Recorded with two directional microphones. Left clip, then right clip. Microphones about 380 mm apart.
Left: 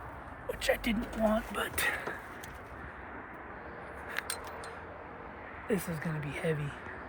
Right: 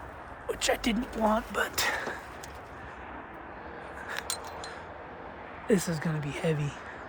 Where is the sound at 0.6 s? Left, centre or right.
Right.